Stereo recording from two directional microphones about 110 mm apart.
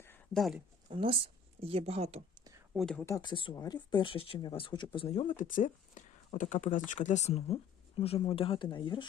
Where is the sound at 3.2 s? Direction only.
50° left (ahead or behind).